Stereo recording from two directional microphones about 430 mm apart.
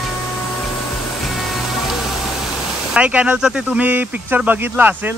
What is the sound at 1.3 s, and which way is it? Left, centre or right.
Music, centre.